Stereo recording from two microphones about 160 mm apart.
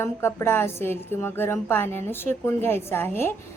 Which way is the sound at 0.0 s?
15° left (ahead or behind).